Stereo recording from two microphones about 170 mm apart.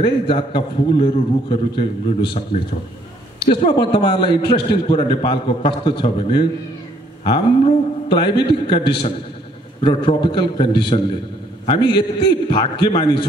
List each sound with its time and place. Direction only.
0.0 s a man's voice: 30° left (ahead or behind)
3.7 s a man's voice: 25° left (ahead or behind)